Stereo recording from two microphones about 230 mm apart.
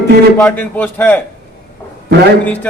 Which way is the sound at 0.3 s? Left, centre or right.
Centre.